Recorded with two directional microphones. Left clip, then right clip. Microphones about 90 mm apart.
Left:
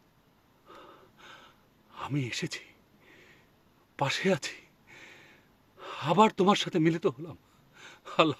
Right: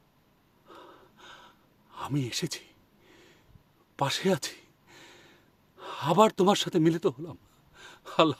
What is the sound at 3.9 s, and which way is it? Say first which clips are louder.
Speech: right 1 dB; 20° right (ahead or behind).